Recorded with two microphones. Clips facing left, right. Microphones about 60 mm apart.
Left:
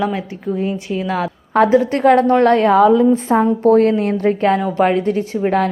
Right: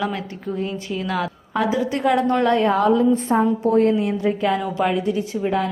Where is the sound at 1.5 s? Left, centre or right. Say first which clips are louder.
Left 9 dB; left.